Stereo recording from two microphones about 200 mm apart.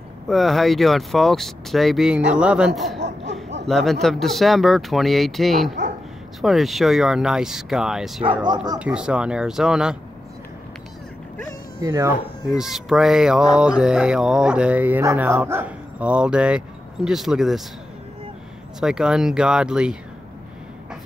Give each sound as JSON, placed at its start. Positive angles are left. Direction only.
{"t": 0.3, "sound": "speech", "side_deg": 0}
{"t": 11.8, "sound": "speech", "side_deg": -15}
{"t": 12.4, "sound": "speech", "side_deg": 0}
{"t": 18.8, "sound": "speech", "side_deg": -5}